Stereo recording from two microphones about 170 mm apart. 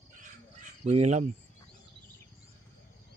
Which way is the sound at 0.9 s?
40° right (ahead or behind).